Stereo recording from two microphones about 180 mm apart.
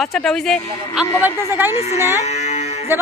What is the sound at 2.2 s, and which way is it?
Music, 40° left (ahead or behind).